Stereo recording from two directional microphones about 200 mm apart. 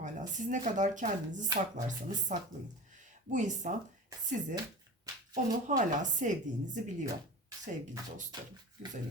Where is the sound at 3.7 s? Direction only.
40° right (ahead or behind).